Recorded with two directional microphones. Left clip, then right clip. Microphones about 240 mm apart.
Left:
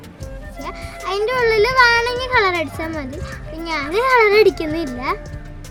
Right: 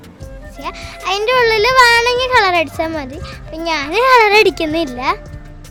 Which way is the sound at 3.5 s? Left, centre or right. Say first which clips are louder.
Right 5 dB; right.